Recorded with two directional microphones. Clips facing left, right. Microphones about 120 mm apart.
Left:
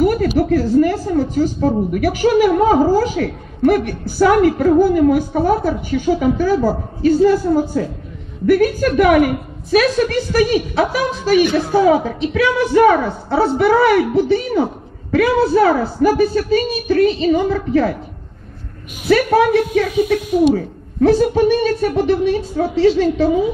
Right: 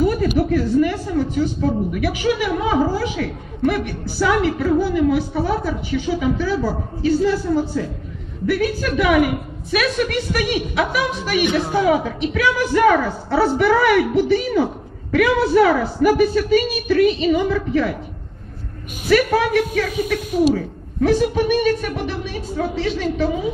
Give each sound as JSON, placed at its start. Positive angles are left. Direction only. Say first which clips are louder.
{"t": 0.4, "sound": "a woman's voice", "louder": "left 4 dB", "side_deg": 40}
{"t": 19.0, "sound": "a woman's voice", "louder": "left 3 dB", "side_deg": 30}